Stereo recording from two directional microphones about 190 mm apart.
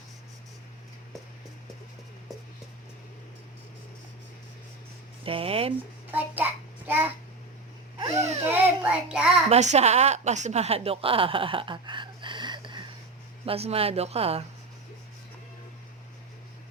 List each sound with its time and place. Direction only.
5.2 s speech: 30° right (ahead or behind)
6.1 s a child's voice: 10° right (ahead or behind)
8.4 s child singing: 10° right (ahead or behind)
9.5 s a woman's voice: 35° right (ahead or behind)